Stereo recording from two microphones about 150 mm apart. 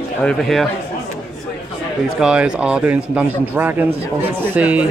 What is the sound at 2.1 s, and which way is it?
Speech, 5° right (ahead or behind).